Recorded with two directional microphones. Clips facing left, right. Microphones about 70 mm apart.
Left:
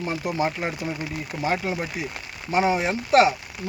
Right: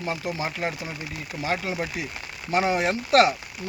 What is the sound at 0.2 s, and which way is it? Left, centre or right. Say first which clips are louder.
Speech: left 2 dB; centre.